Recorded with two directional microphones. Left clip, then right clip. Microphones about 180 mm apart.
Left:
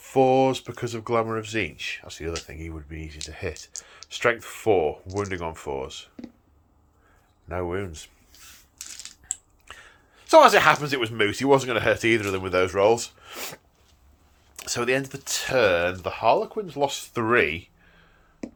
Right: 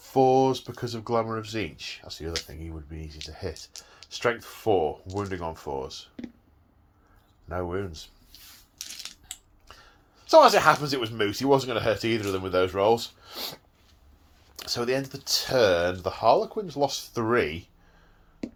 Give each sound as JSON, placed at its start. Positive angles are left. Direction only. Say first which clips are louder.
{"t": 0.0, "sound": "speech", "louder": "left 1 dB", "side_deg": 30}
{"t": 6.2, "sound": "speech", "louder": "right 1 dB", "side_deg": -10}
{"t": 7.4, "sound": "speech", "louder": "left 2 dB", "side_deg": 30}
{"t": 9.6, "sound": "speech", "louder": "left 6 dB", "side_deg": 35}
{"t": 15.4, "sound": "speech", "louder": "left 2 dB", "side_deg": 10}
{"t": 16.9, "sound": "speech", "louder": "left 3 dB", "side_deg": 25}
{"t": 18.4, "sound": "a sound", "louder": "even", "side_deg": 0}